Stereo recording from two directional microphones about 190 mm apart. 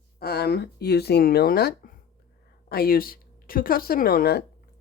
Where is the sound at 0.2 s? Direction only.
55° left (ahead or behind).